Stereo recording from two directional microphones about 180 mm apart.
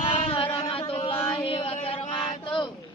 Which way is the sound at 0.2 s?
30° left (ahead or behind).